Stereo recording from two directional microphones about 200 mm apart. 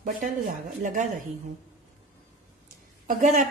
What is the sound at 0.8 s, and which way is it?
Speech, 40° right (ahead or behind).